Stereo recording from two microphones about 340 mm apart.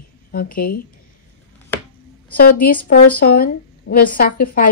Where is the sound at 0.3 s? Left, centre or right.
Left.